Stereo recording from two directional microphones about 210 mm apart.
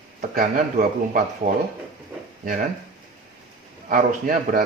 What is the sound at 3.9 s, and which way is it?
Speech, 40° right (ahead or behind).